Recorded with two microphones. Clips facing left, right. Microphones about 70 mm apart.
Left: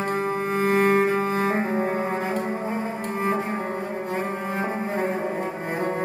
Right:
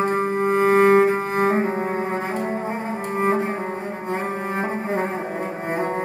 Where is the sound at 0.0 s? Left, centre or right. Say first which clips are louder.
Right 4 dB; right.